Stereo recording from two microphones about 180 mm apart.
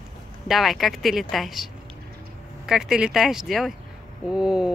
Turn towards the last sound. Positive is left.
turn(degrees=-5)  # may be behind; listen again after turning